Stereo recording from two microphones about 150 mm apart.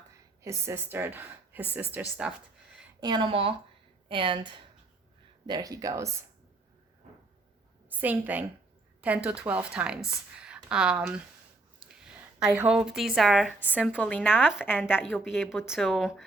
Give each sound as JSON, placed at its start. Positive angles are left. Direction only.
{"t": 0.4, "sound": "a woman's voice", "side_deg": -20}
{"t": 3.0, "sound": "speech", "side_deg": -30}
{"t": 7.9, "sound": "a woman's voice", "side_deg": -10}
{"t": 14.0, "sound": "a woman's voice", "side_deg": 10}
{"t": 15.1, "sound": "speech", "side_deg": 0}